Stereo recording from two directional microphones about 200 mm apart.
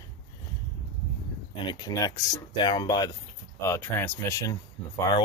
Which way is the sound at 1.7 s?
20° left (ahead or behind).